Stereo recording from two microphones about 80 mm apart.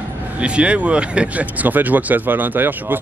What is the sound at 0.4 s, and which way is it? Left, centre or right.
Speech, centre.